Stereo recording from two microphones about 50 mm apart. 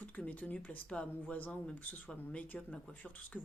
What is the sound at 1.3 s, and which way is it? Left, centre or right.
Speech, left.